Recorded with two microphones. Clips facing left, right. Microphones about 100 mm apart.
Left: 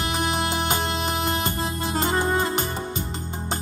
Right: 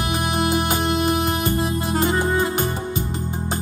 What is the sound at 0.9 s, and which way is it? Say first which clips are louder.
Music: right 5 dB; 25° left (ahead or behind).